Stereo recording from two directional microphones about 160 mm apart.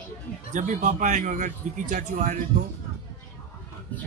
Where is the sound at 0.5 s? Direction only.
50° right (ahead or behind).